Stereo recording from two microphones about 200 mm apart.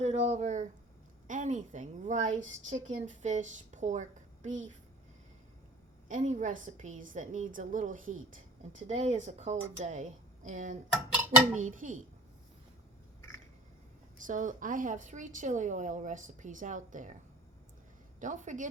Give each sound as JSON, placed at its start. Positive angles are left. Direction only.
{"t": 0.0, "sound": "a sound", "side_deg": -35}
{"t": 1.3, "sound": "a woman's voice", "side_deg": -40}
{"t": 6.1, "sound": "a woman's voice", "side_deg": -40}
{"t": 10.9, "sound": "dishes", "side_deg": -5}
{"t": 11.5, "sound": "a woman's voice", "side_deg": -40}
{"t": 14.2, "sound": "a woman's voice", "side_deg": -40}
{"t": 18.2, "sound": "a woman's voice", "side_deg": -40}